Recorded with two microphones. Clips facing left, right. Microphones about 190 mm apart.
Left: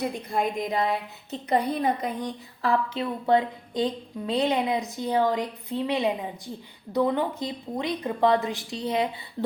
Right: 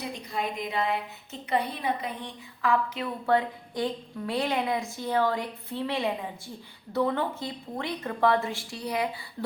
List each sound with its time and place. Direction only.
0.0 s a woman's voice: 50° left (ahead or behind)
0.8 s a woman's voice: 35° left (ahead or behind)